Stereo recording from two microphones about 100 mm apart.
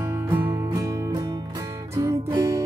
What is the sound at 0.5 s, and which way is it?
Music, 35° right (ahead or behind).